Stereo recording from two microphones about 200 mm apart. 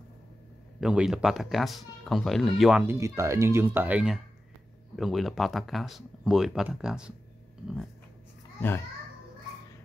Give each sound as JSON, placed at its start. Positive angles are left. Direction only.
{"t": 0.7, "sound": "speech", "side_deg": -5}
{"t": 2.9, "sound": "speech", "side_deg": -15}
{"t": 8.5, "sound": "a child's voice", "side_deg": 10}